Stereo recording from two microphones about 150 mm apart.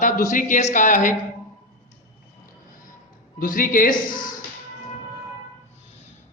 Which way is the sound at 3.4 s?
70° left (ahead or behind).